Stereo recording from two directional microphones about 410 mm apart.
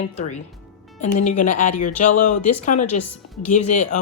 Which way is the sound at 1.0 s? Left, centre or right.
Centre.